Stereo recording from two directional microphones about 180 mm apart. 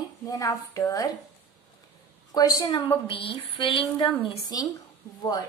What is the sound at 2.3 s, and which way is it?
Speech, 20° left (ahead or behind).